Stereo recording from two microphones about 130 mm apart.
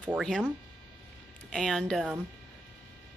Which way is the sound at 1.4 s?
5° left (ahead or behind).